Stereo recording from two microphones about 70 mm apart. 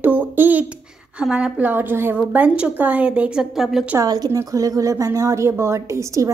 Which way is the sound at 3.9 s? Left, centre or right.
Right.